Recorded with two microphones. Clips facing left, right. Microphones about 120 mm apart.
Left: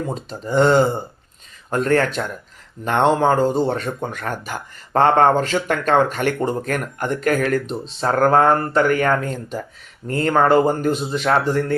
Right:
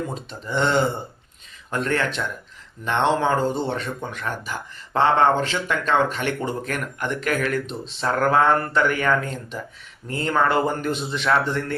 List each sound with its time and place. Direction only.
0.1 s speech: 40° left (ahead or behind)